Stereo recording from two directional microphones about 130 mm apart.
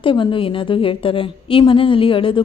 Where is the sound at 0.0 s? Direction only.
40° left (ahead or behind).